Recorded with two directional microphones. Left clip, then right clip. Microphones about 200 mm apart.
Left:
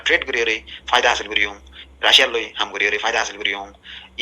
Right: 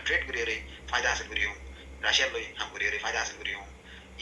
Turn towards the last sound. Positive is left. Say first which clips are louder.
# left 11 dB
turn(degrees=45)  # may be behind; listen again after turning